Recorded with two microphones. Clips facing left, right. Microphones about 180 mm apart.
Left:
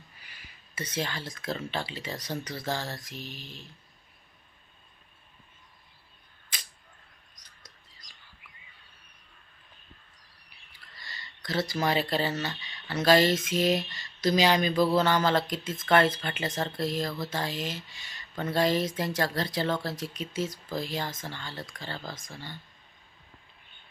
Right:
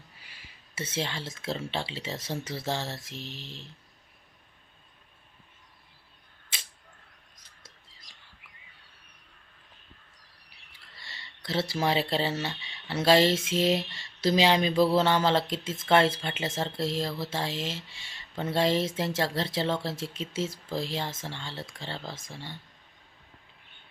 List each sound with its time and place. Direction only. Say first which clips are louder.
0.2 s speech: even; 25° right (ahead or behind)
6.5 s camera: even; 25° right (ahead or behind)
7.4 s whispering: even; 25° right (ahead or behind)
10.7 s a sound: left 1 dB; 25° right (ahead or behind)
13.1 s speech: even; 25° right (ahead or behind)